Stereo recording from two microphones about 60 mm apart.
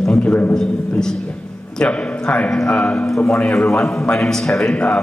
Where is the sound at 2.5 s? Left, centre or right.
Centre.